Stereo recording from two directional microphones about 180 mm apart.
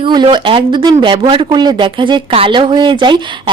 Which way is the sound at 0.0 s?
25° right (ahead or behind).